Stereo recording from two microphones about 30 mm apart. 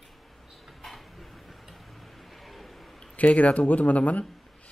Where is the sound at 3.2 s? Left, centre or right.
Left.